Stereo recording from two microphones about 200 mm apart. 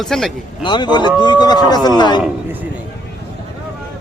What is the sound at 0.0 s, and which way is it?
Speech, centre (ahead or behind).